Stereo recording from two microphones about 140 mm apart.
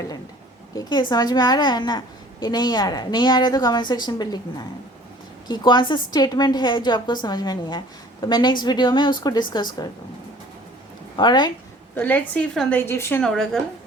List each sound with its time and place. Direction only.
0.8 s a woman's voice: 30° left (ahead or behind)
5.5 s a woman's voice: 30° left (ahead or behind)
11.2 s a woman's voice: 30° left (ahead or behind)
11.9 s a woman's voice: 10° left (ahead or behind)
13.2 s a woman's voice: 5° left (ahead or behind)